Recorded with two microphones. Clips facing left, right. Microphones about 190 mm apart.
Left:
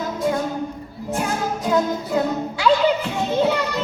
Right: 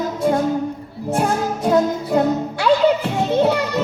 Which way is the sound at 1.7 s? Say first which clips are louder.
Right 4 dB; 50° right (ahead or behind).